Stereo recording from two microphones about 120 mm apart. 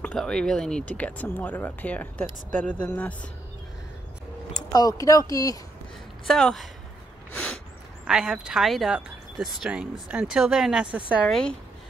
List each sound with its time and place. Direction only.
0.0 s speech: 5° left (ahead or behind)
4.6 s speech: 35° left (ahead or behind)
6.2 s speech: 5° left (ahead or behind)
8.1 s speech: 5° right (ahead or behind)
11.2 s speech: 5° left (ahead or behind)